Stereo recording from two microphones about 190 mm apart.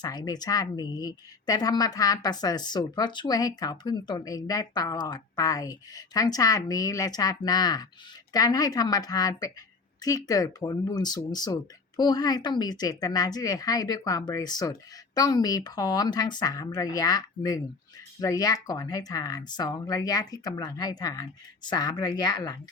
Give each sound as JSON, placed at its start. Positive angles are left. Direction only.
{"t": 0.0, "sound": "speech", "side_deg": 20}